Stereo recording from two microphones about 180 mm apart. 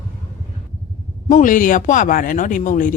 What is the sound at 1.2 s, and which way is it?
Speech, 45° left (ahead or behind).